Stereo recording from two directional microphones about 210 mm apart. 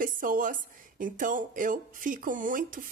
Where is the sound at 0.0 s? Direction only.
40° right (ahead or behind).